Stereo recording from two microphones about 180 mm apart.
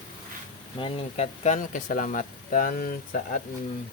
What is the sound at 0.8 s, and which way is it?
Speech, 35° left (ahead or behind).